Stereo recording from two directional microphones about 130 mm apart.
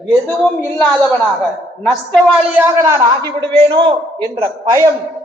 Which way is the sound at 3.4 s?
40° right (ahead or behind).